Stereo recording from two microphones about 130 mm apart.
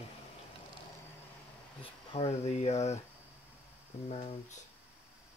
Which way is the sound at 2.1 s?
55° left (ahead or behind).